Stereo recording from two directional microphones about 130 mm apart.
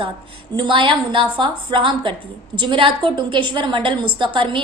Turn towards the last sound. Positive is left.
turn(degrees=-40)  # may be behind; listen again after turning